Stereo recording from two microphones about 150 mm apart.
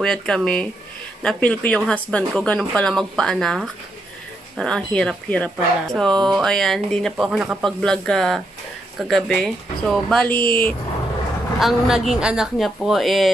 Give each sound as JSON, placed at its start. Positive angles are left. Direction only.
{"t": 0.0, "sound": "speech", "side_deg": 5}
{"t": 10.3, "sound": "speech", "side_deg": 80}
{"t": 11.6, "sound": "speech", "side_deg": 0}